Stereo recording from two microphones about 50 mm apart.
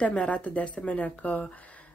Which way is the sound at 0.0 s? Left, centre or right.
Left.